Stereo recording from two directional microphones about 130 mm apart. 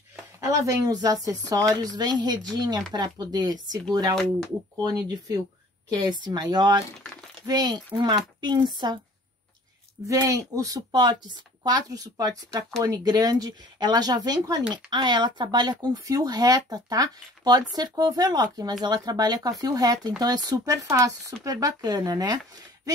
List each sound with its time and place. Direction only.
0.4 s speech: 25° right (ahead or behind)
4.1 s speech: 5° left (ahead or behind)
4.8 s speech: 30° right (ahead or behind)
10.0 s speech: 25° right (ahead or behind)